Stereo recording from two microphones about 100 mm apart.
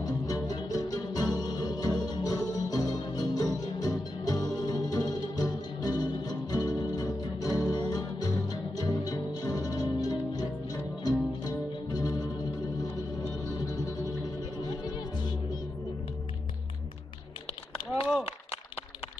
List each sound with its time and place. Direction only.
0.0 s music: 35° left (ahead or behind)